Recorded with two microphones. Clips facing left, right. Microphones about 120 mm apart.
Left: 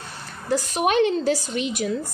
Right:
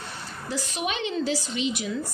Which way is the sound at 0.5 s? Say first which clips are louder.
Left 9 dB; 50° left (ahead or behind).